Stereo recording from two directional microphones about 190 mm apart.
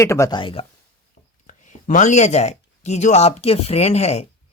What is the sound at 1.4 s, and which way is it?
Speech, 40° left (ahead or behind).